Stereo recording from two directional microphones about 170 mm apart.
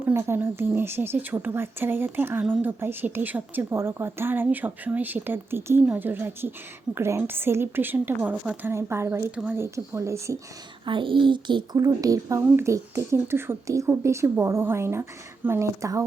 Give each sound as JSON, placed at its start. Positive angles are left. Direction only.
{"t": 0.0, "sound": "speech", "side_deg": -15}
{"t": 10.8, "sound": "speech", "side_deg": -30}